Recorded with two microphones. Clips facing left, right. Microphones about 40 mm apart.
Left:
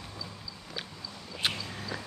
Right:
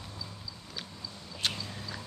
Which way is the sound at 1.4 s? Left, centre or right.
Centre.